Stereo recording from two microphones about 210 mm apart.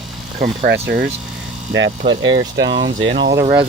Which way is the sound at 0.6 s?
45° right (ahead or behind).